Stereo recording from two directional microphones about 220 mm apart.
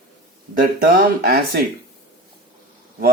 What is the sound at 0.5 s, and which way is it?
Speech, 40° right (ahead or behind).